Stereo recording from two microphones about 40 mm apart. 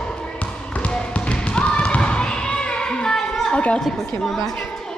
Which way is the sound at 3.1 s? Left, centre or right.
Centre.